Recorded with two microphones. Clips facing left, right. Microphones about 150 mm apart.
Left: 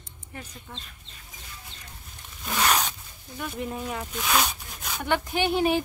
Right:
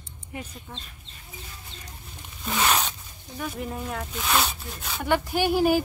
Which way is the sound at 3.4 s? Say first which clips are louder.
Even; centre (ahead or behind).